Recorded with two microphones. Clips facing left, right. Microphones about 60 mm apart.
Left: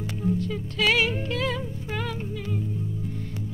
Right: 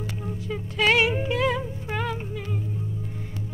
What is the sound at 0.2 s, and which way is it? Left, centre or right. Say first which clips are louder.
Music: left 5 dB; centre.